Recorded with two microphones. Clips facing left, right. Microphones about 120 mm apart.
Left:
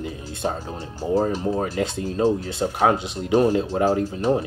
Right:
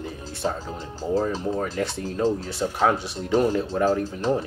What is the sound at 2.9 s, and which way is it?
Speech, 20° left (ahead or behind).